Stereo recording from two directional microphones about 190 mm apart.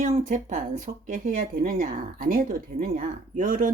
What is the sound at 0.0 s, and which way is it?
Speech, 40° right (ahead or behind).